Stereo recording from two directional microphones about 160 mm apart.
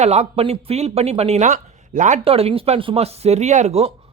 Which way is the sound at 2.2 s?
35° right (ahead or behind).